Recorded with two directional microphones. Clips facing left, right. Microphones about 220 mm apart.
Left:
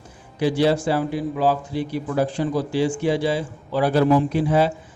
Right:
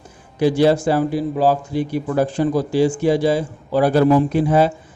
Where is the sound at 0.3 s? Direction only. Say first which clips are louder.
Right 4 dB; 45° right (ahead or behind).